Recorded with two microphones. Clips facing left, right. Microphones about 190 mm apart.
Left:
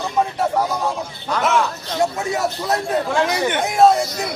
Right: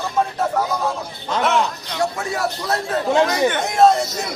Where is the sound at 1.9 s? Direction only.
20° left (ahead or behind).